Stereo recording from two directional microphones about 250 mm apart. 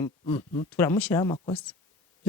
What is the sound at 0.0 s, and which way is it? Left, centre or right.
Speech, centre.